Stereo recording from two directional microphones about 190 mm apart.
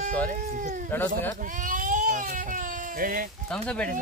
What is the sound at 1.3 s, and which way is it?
Baby cry, 45° right (ahead or behind).